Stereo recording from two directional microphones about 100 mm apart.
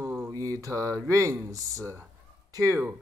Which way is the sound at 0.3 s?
35° right (ahead or behind).